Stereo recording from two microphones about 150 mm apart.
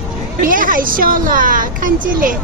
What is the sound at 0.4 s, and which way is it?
A woman's voice, 65° right (ahead or behind).